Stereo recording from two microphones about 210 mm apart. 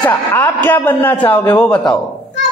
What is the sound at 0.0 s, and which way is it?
A man's voice, 10° left (ahead or behind).